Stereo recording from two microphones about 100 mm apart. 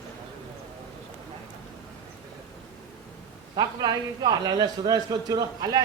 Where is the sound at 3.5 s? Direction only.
45° right (ahead or behind).